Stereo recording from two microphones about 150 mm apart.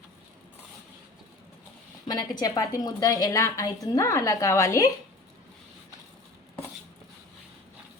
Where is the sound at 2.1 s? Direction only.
25° left (ahead or behind).